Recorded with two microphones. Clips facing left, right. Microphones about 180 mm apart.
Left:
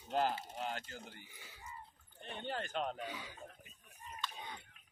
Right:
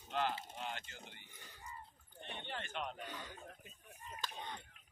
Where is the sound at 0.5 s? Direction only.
40° left (ahead or behind).